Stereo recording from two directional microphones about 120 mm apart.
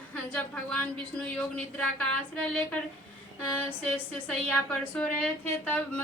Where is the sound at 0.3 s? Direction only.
10° left (ahead or behind).